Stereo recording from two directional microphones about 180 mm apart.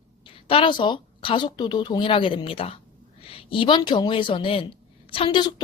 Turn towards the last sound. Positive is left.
turn(degrees=25)  # may be behind; listen again after turning